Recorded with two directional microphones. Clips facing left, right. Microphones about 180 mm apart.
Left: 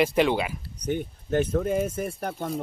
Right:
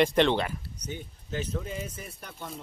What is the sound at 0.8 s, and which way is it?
Speech, 55° left (ahead or behind).